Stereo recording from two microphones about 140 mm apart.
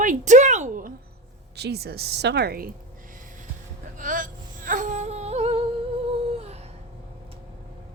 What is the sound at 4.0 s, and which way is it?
Music, 70° right (ahead or behind).